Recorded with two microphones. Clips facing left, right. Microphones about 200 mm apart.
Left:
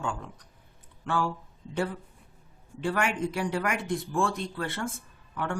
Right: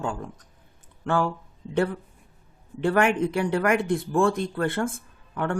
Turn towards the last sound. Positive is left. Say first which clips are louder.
# right 5 dB
turn(degrees=-55)  # may be behind; listen again after turning